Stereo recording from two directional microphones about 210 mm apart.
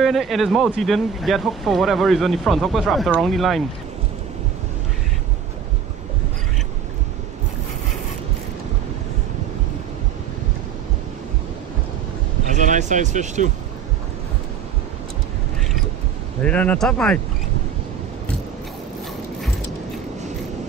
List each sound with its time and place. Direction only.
0.0 s speech: centre (ahead or behind)
12.5 s speech: 35° right (ahead or behind)
16.4 s speech: 5° left (ahead or behind)